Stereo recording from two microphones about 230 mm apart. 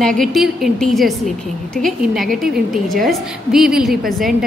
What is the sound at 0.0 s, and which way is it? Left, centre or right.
A woman's voice, centre.